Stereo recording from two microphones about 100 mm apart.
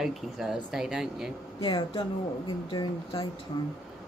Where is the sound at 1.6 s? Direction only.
50° left (ahead or behind).